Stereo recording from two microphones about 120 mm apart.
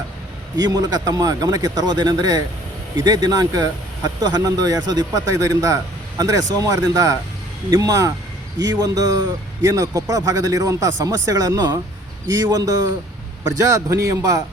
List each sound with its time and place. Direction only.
0.5 s speech: 35° right (ahead or behind)